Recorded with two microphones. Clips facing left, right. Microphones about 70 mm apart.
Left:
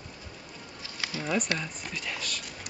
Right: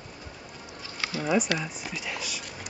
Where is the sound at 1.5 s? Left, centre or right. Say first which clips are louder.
Right 2 dB; centre.